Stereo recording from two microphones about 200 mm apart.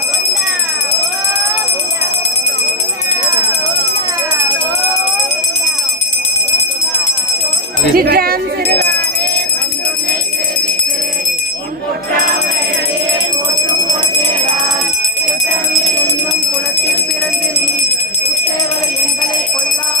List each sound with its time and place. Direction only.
7.9 s speech: 50° right (ahead or behind)